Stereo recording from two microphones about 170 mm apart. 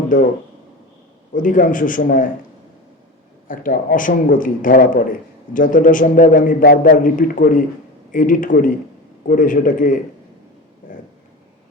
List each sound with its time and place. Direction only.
0.1 s a man's voice: 50° left (ahead or behind)
1.3 s a man's voice: 50° left (ahead or behind)
3.5 s a man's voice: 55° left (ahead or behind)